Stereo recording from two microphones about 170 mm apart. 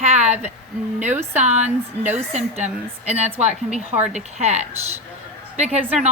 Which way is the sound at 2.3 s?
40° right (ahead or behind).